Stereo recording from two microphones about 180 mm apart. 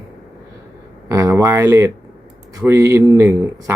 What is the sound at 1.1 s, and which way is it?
Speech, 15° right (ahead or behind).